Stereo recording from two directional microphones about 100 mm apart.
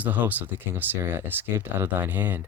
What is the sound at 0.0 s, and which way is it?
Speech, 15° right (ahead or behind).